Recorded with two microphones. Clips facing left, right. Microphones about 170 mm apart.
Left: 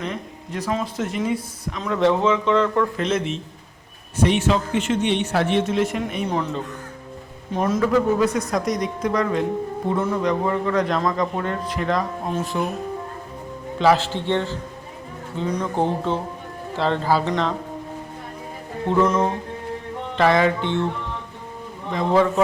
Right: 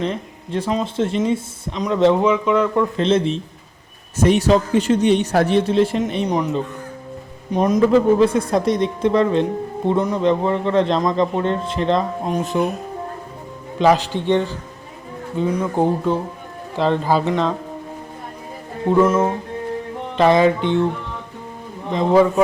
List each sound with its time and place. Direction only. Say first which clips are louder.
0.0 s speech: right 5 dB; 30° right (ahead or behind); by 2.8 s 10° right (ahead or behind)
3.0 s speech: right 6 dB; 30° right (ahead or behind)
6.2 s speech: right 4 dB; 15° right (ahead or behind)
13.7 s speech: right 2 dB; 15° right (ahead or behind)
18.9 s music: right 4 dB; 10° right (ahead or behind)
20.1 s speech: right 4 dB; 20° right (ahead or behind)
21.8 s speech: right 4 dB; 20° right (ahead or behind)